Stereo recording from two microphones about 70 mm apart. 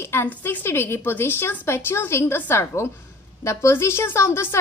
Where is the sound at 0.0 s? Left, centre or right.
Left.